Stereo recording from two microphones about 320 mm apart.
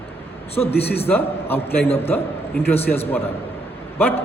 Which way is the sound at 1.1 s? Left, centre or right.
Centre.